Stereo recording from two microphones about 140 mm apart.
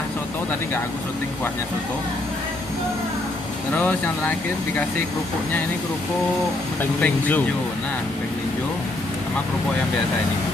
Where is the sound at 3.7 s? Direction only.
10° left (ahead or behind).